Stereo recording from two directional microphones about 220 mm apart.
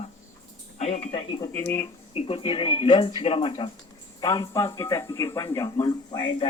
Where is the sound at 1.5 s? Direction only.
10° left (ahead or behind).